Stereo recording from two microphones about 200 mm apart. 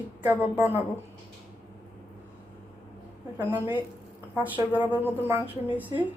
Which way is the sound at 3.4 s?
10° right (ahead or behind).